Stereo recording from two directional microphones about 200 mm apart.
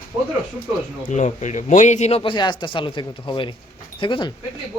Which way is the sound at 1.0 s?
35° left (ahead or behind).